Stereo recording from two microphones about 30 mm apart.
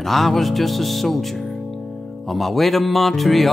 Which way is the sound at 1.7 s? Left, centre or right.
Centre.